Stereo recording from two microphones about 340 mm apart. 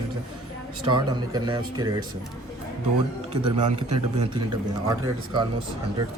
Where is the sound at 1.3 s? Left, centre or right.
Centre.